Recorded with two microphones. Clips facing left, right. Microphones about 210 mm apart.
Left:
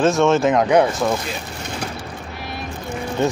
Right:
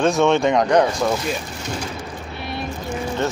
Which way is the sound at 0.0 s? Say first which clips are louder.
Left 1 dB; centre (ahead or behind).